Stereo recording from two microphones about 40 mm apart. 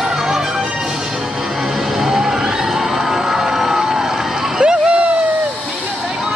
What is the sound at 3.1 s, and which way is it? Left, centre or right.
Crowd, centre.